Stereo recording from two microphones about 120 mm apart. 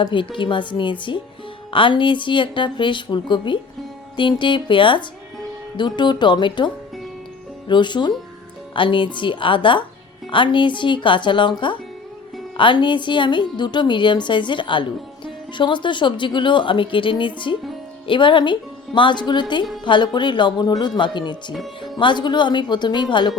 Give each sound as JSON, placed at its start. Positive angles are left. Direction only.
{"t": 0.0, "sound": "a woman's voice", "side_deg": 40}
{"t": 7.7, "sound": "a woman's voice", "side_deg": 40}
{"t": 21.5, "sound": "speech", "side_deg": 0}
{"t": 21.9, "sound": "a woman's voice", "side_deg": 40}